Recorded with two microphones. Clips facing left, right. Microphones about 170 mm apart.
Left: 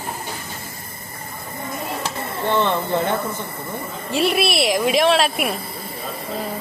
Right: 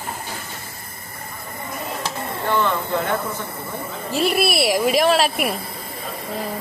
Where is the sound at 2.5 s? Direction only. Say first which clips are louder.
Left 1 dB; 25° left (ahead or behind).